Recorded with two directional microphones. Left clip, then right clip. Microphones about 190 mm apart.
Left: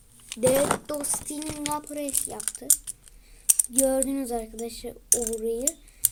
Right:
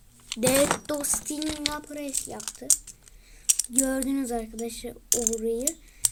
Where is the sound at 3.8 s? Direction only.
15° right (ahead or behind).